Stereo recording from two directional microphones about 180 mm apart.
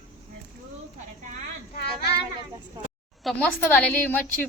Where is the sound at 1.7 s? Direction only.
65° left (ahead or behind).